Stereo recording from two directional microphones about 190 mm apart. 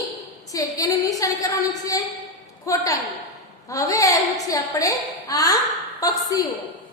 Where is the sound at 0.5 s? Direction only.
20° left (ahead or behind).